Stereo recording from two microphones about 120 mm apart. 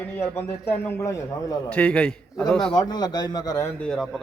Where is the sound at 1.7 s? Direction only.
10° left (ahead or behind).